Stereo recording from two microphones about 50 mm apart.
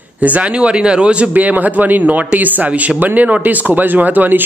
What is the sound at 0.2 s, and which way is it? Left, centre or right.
Speech, right.